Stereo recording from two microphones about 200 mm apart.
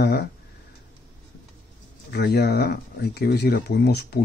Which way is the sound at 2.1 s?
55° left (ahead or behind).